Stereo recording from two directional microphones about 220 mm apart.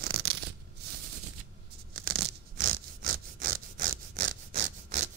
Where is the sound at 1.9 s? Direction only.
60° right (ahead or behind).